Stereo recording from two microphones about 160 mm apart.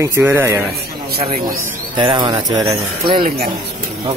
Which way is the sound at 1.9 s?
25° right (ahead or behind).